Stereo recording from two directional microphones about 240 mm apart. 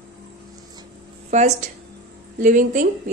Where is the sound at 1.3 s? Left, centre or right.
Right.